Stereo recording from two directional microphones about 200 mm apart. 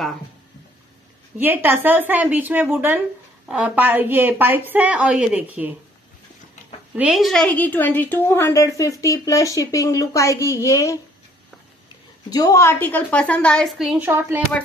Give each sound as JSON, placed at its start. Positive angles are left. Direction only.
{"t": 1.4, "sound": "a woman's voice", "side_deg": -10}
{"t": 7.0, "sound": "speech", "side_deg": 0}
{"t": 12.3, "sound": "a woman's voice", "side_deg": 15}